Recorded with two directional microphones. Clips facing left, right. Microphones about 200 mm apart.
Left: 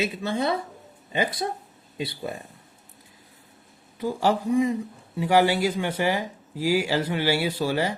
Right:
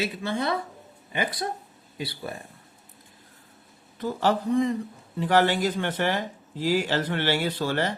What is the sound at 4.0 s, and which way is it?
A man's voice, 10° left (ahead or behind).